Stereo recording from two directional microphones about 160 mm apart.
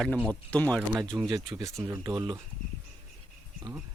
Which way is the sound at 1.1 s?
10° right (ahead or behind).